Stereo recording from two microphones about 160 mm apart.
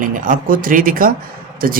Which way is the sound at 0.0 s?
60° right (ahead or behind).